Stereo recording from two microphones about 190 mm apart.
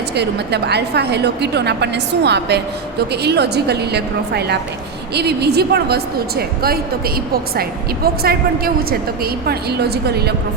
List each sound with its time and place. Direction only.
0.1 s a woman's voice: 60° right (ahead or behind)